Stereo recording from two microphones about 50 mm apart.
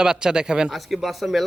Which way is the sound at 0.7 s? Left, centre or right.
Centre.